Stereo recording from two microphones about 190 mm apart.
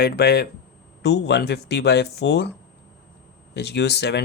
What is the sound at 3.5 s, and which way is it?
Speech, 60° left (ahead or behind).